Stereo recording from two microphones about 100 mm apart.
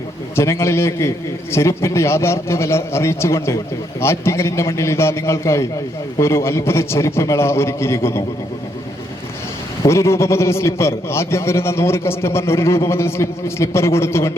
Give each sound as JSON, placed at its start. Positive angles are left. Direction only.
{"t": 0.3, "sound": "a man's voice", "side_deg": 25}
{"t": 9.8, "sound": "a man's voice", "side_deg": 30}